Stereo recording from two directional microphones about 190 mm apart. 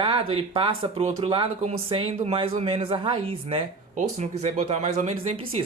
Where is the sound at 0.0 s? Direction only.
30° right (ahead or behind).